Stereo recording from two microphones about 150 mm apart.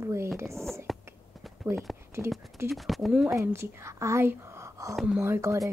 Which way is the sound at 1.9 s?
Centre (ahead or behind).